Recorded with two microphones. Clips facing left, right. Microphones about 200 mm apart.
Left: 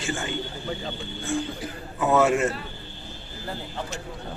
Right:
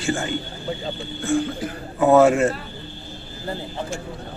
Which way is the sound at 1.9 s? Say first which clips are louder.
Right 6 dB; 35° right (ahead or behind).